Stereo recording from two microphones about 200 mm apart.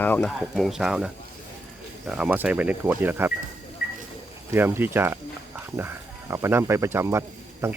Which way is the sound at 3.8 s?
50° left (ahead or behind).